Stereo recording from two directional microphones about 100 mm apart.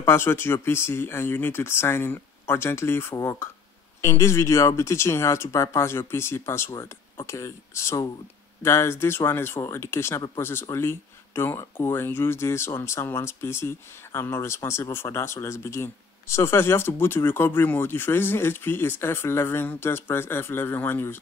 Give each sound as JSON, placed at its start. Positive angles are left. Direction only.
{"t": 0.0, "sound": "speech", "side_deg": 25}